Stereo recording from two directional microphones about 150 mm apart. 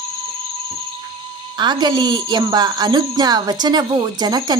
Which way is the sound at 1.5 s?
30° right (ahead or behind).